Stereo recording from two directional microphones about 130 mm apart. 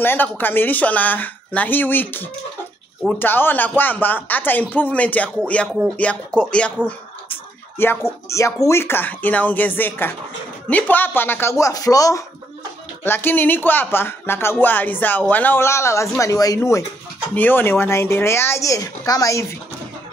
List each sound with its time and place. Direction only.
0.0 s speech: 15° left (ahead or behind)
13.0 s speech: 15° left (ahead or behind)